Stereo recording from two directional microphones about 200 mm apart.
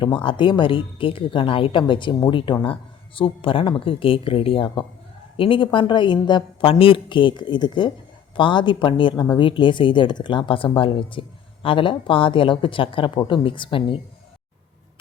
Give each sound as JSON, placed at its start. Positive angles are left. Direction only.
{"t": 0.2, "sound": "speech", "side_deg": 25}